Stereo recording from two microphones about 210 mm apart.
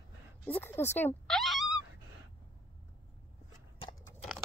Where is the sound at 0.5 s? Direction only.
10° left (ahead or behind).